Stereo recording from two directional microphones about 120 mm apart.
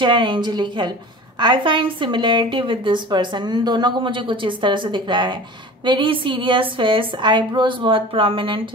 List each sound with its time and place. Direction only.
0.0 s a woman's voice: 40° right (ahead or behind)